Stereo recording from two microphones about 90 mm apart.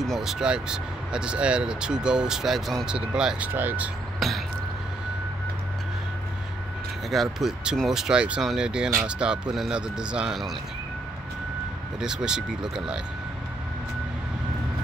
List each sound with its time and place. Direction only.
0.0 s speech: 5° right (ahead or behind); by 3.9 s 20° right (ahead or behind)
4.2 s speech: centre (ahead or behind)
7.1 s speech: centre (ahead or behind)
12.0 s speech: 5° right (ahead or behind)